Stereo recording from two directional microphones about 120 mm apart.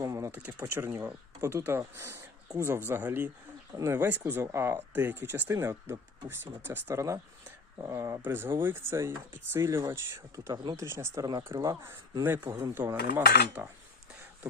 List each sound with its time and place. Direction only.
0.0 s speech: 25° right (ahead or behind)
10.5 s speech: 40° right (ahead or behind)
10.8 s speech: 20° right (ahead or behind)
12.9 s cutlery: 15° right (ahead or behind)